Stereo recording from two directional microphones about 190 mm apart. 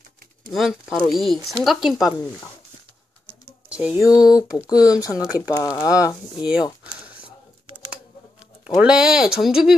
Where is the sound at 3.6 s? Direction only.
5° right (ahead or behind).